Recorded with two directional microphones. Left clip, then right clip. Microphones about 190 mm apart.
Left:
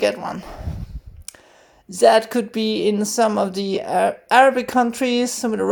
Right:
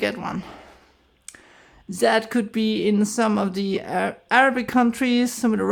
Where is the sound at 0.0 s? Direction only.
10° right (ahead or behind).